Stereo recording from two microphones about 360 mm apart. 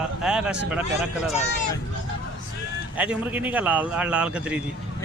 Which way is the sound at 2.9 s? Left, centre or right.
Centre.